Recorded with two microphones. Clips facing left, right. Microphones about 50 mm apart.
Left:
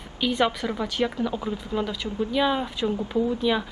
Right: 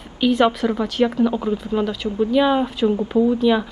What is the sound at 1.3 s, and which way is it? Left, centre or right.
A woman's voice, centre.